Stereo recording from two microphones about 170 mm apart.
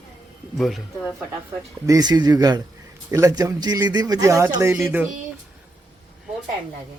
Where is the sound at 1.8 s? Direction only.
20° right (ahead or behind).